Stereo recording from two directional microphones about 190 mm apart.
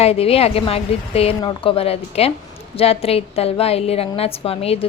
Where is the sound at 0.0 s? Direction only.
30° left (ahead or behind).